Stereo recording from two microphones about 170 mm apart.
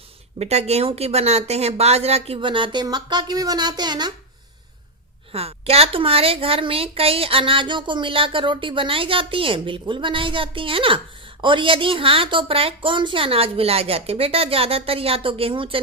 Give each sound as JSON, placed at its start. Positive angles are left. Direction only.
{"t": 0.3, "sound": "a woman's voice", "side_deg": -40}
{"t": 5.3, "sound": "a woman's voice", "side_deg": -35}